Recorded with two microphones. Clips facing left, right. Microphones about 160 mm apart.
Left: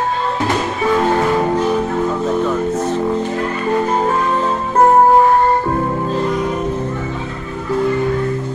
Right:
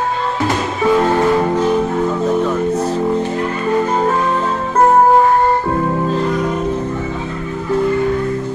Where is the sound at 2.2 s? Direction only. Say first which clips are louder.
Right 1 dB; centre (ahead or behind).